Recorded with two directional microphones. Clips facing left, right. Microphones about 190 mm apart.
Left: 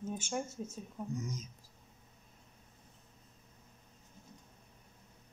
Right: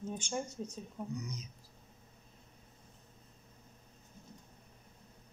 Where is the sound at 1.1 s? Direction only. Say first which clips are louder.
Left 5 dB; 45° left (ahead or behind).